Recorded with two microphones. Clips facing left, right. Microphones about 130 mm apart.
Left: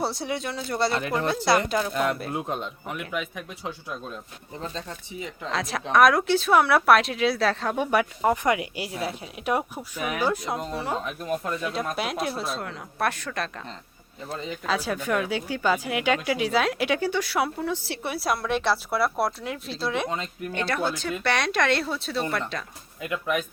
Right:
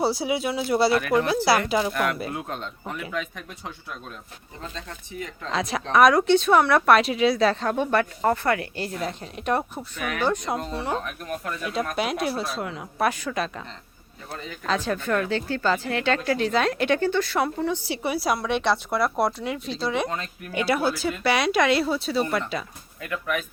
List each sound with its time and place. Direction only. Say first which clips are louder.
0.0 s speech: right 5 dB; 5° right (ahead or behind)
1.9 s speech: even; 20° left (ahead or behind)
5.5 s speech: right 1 dB; centre (ahead or behind)
11.0 s speech: left 3 dB; 20° left (ahead or behind)
11.6 s speech: right 2 dB; centre (ahead or behind)
14.7 s speech: right 2 dB; 10° left (ahead or behind)
23.0 s speech: left 1 dB; 20° left (ahead or behind)